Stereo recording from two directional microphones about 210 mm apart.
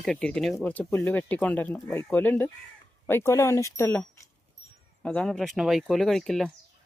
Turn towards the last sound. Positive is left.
turn(degrees=0)  # may be behind; listen again after turning